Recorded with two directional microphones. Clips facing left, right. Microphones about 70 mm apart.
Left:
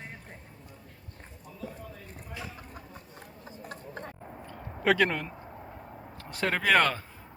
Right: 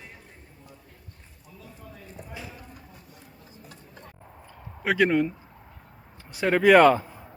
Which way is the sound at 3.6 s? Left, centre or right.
Left.